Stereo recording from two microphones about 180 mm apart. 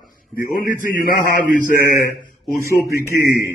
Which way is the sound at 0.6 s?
50° left (ahead or behind).